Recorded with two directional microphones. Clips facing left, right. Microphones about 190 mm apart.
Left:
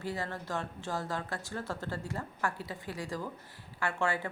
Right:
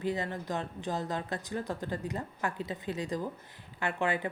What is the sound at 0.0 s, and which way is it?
A woman's voice, 20° right (ahead or behind).